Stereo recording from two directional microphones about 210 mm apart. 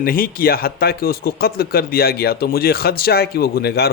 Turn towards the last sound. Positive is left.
turn(degrees=50)  # may be behind; listen again after turning